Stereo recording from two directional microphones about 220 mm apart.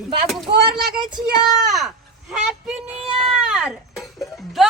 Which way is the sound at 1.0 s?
20° right (ahead or behind).